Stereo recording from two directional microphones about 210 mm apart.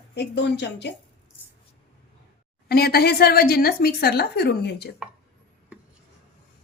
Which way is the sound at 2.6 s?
50° left (ahead or behind).